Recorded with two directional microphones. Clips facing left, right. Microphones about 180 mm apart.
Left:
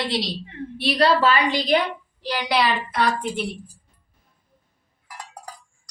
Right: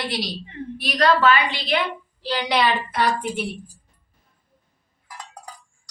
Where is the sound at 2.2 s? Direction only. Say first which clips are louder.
Right 1 dB; 10° left (ahead or behind).